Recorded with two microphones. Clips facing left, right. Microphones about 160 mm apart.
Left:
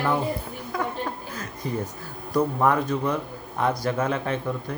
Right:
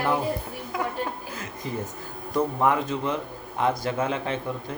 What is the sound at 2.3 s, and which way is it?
Speech, 20° right (ahead or behind).